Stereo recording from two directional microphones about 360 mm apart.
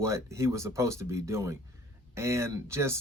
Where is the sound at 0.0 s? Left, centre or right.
Centre.